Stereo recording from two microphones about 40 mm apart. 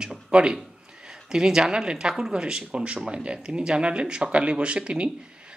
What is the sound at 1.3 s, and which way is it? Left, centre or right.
A woman's voice, centre.